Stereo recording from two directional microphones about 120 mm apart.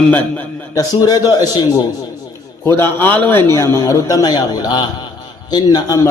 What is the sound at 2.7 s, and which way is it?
A man's voice, 20° left (ahead or behind).